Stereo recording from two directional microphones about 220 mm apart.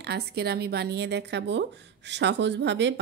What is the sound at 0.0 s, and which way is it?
Speech, 50° right (ahead or behind).